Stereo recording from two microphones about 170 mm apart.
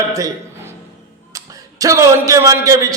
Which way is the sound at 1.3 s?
20° right (ahead or behind).